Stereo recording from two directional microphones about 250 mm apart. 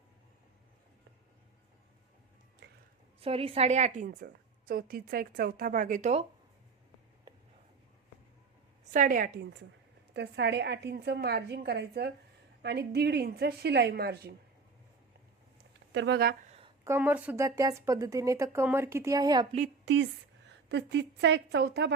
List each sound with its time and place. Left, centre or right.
2.6 s a sound: right
3.2 s a woman's voice: right
8.8 s a woman's voice: right
15.9 s a woman's voice: right
16.5 s a sound: right
16.8 s speech: centre
19.8 s a woman's voice: right